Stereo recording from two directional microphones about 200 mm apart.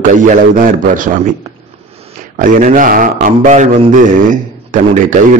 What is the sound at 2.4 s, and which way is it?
A man's voice, 40° right (ahead or behind).